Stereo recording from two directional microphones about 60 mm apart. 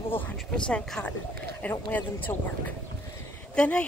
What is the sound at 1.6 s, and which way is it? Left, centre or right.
Speech, left.